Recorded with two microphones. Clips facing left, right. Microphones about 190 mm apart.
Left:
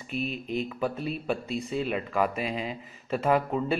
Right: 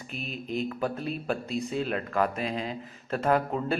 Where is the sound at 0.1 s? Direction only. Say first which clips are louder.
Left 3 dB; centre (ahead or behind).